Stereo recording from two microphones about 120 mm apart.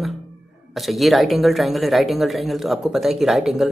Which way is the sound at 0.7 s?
Centre (ahead or behind).